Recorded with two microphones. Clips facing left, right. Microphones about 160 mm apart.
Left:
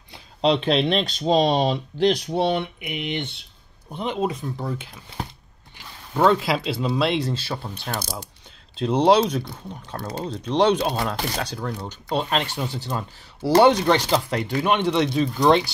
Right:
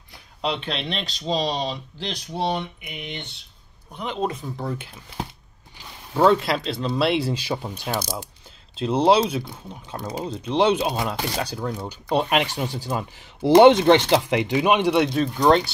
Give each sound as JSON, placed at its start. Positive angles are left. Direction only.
{"t": 0.1, "sound": "speech", "side_deg": 35}
{"t": 3.9, "sound": "speech", "side_deg": 20}
{"t": 4.2, "sound": "speech", "side_deg": 0}
{"t": 6.1, "sound": "speech", "side_deg": 0}
{"t": 7.0, "sound": "speech", "side_deg": -5}
{"t": 8.7, "sound": "speech", "side_deg": 0}